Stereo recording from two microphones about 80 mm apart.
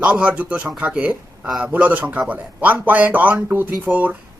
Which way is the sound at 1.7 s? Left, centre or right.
Centre.